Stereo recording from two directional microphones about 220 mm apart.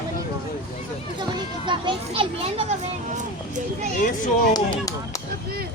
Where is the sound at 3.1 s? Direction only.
35° right (ahead or behind).